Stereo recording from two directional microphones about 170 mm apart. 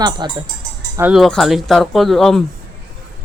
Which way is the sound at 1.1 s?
Centre (ahead or behind).